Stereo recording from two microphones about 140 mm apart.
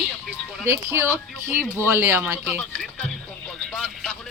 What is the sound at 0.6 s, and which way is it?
Speech, 20° right (ahead or behind).